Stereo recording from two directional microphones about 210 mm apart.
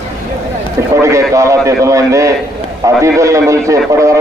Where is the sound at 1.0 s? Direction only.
15° right (ahead or behind).